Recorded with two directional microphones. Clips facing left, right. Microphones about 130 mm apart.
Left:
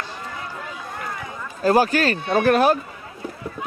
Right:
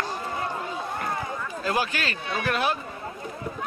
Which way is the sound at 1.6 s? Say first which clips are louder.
Left 11 dB; 40° left (ahead or behind).